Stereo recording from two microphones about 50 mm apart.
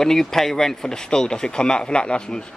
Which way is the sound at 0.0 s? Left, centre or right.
Centre.